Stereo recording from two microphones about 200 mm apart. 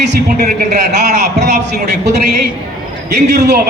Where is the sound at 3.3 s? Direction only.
55° right (ahead or behind).